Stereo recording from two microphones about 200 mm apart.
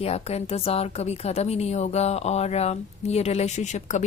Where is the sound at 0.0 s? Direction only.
30° left (ahead or behind).